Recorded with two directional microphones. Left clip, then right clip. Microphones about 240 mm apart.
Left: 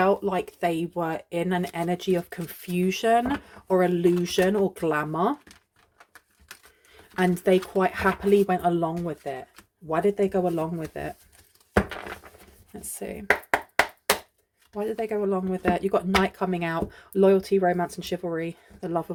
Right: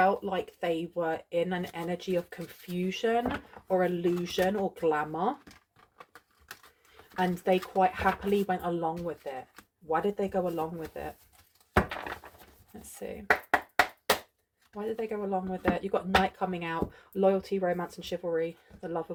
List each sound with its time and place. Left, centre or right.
0.0 s speech: left
7.2 s speech: left
12.7 s speech: left
14.8 s speech: left